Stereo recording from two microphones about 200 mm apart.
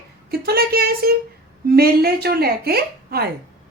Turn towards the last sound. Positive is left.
turn(degrees=-50)  # may be behind; listen again after turning